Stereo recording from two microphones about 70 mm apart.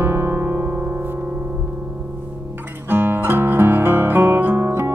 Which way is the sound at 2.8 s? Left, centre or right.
Right.